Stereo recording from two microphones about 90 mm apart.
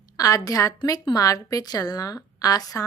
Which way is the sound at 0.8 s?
50° left (ahead or behind).